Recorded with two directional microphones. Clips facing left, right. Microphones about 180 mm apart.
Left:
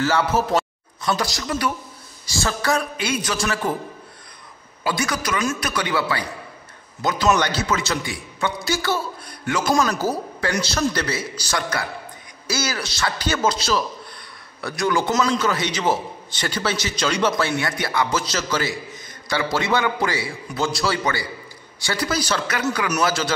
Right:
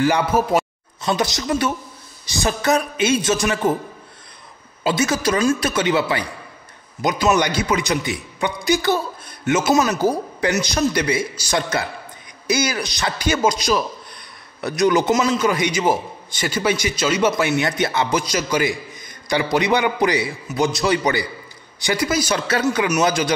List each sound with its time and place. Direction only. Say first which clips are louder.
0.0 s a man's voice: right 3 dB; 15° right (ahead or behind)
4.8 s a man's voice: right 5 dB; 25° right (ahead or behind)
9.6 s a man's voice: right 2 dB; 5° right (ahead or behind)
22.5 s a man's voice: right 4 dB; 25° right (ahead or behind)